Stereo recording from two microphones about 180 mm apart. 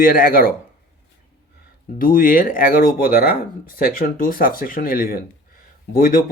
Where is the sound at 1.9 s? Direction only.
50° left (ahead or behind).